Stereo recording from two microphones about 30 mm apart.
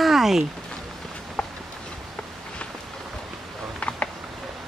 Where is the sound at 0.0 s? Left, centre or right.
Centre.